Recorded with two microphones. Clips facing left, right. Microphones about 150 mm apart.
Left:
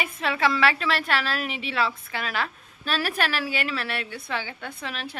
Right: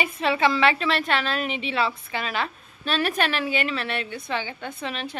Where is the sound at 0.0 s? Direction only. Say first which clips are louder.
Right 3 dB; centre (ahead or behind).